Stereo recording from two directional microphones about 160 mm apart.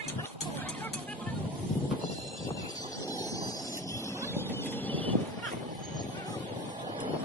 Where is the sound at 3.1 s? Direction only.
20° left (ahead or behind).